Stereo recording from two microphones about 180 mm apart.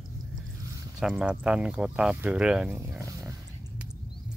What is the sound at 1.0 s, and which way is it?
Speech, 5° right (ahead or behind).